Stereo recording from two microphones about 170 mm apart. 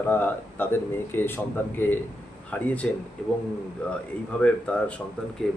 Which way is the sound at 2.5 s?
10° left (ahead or behind).